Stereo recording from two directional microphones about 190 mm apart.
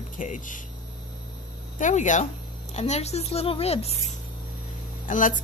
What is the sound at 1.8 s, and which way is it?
Speech, 40° left (ahead or behind).